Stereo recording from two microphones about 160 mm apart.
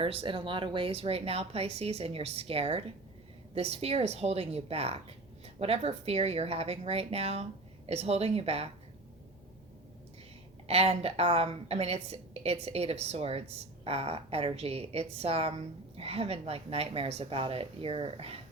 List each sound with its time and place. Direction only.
0.0 s a woman's voice: 35° right (ahead or behind)
10.7 s a woman's voice: 40° right (ahead or behind)